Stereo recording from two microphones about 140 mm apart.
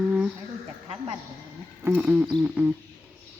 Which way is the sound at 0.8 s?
50° right (ahead or behind).